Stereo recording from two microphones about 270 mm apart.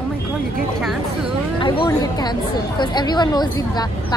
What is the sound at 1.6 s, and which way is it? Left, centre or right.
Speech, centre.